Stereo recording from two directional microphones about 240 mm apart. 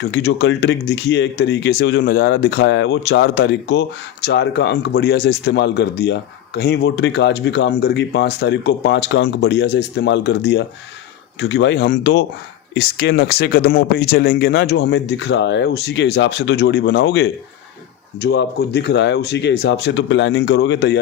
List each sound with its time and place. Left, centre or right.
0.0 s speech: left